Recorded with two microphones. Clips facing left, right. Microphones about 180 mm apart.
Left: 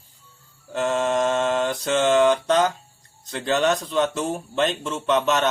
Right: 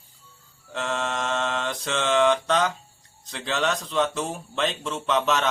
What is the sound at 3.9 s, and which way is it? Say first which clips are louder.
Speech: left 3 dB; centre (ahead or behind).